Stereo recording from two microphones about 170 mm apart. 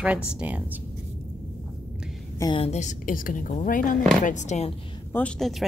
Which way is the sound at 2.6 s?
40° left (ahead or behind).